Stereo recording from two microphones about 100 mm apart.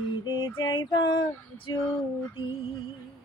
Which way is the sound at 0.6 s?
50° left (ahead or behind).